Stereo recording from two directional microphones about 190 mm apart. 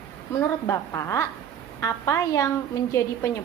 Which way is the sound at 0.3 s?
15° left (ahead or behind).